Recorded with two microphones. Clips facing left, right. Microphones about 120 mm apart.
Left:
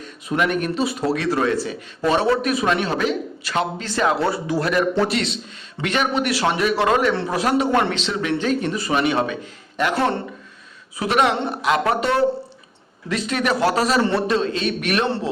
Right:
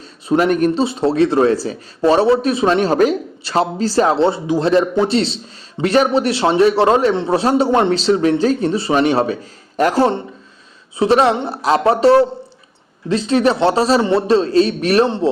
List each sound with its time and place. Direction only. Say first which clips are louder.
0.0 s speech: right 6 dB; 35° right (ahead or behind)
0.9 s a man's voice: right 7 dB; 25° right (ahead or behind)
7.1 s a man's voice: right 5 dB; 20° right (ahead or behind)
7.3 s a man's voice: right 4 dB; 30° right (ahead or behind)